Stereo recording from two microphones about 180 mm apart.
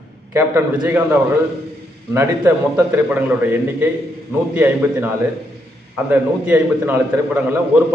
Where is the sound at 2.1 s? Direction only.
15° right (ahead or behind).